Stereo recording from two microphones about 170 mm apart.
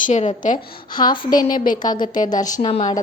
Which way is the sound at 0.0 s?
45° left (ahead or behind).